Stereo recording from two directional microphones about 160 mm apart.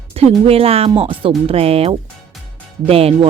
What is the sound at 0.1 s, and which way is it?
Speech, 40° right (ahead or behind).